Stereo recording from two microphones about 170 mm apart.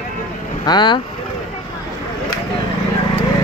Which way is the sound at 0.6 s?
25° left (ahead or behind).